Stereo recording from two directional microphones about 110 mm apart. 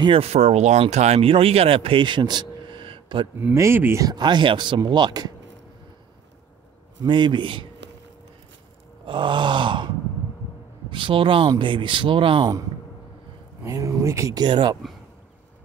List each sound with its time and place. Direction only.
0.0 s speech: 60° right (ahead or behind)
3.5 s speech: 25° right (ahead or behind)
4.0 s speech: 40° right (ahead or behind)
7.0 s speech: 45° right (ahead or behind)
9.0 s speech: 45° right (ahead or behind)
13.7 s speech: 30° right (ahead or behind)
14.4 s speech: 40° right (ahead or behind)